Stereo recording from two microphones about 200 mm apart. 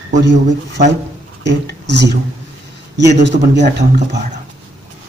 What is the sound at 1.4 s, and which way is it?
A man's voice, 60° right (ahead or behind).